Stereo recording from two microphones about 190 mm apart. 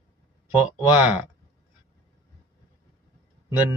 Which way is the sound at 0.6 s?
5° right (ahead or behind).